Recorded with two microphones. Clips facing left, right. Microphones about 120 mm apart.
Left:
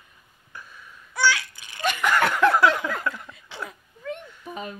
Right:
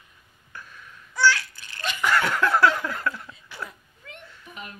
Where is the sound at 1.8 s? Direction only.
55° left (ahead or behind).